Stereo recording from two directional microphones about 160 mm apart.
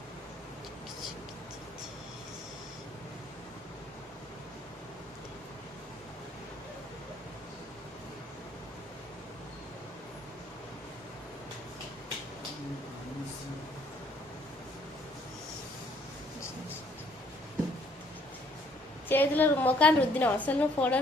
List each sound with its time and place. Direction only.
19.0 s a woman's voice: 10° left (ahead or behind)